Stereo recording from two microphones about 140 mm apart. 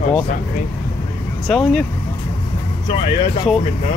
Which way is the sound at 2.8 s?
40° left (ahead or behind).